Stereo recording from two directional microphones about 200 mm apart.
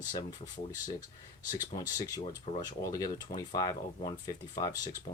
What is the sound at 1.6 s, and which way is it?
Speech, 20° left (ahead or behind).